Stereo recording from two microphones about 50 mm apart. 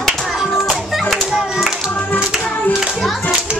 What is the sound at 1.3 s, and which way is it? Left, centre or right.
Music, centre.